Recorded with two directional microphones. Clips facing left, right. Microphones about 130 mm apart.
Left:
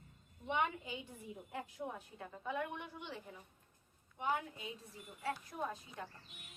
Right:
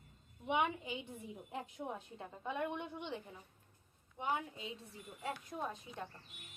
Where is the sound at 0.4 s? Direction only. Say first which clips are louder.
Right 2 dB; 15° right (ahead or behind).